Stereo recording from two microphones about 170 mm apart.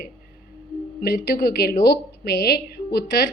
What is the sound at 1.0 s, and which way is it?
A woman's voice, 70° left (ahead or behind).